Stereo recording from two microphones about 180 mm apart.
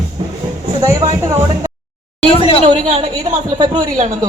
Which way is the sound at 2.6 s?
35° right (ahead or behind).